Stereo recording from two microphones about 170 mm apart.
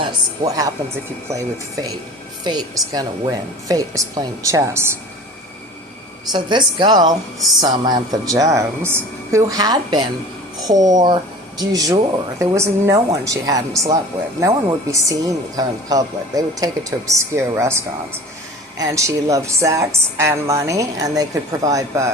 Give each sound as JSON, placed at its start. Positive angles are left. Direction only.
{"t": 0.4, "sound": "a woman's voice", "side_deg": -20}
{"t": 6.3, "sound": "a woman's voice", "side_deg": -25}